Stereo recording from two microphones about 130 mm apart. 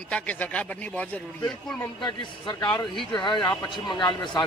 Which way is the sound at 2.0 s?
35° left (ahead or behind).